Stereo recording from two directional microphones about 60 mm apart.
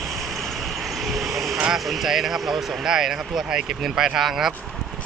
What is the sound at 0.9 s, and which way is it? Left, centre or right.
Vehicle, centre.